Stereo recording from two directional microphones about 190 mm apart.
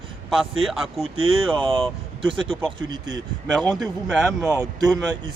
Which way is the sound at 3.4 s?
Centre (ahead or behind).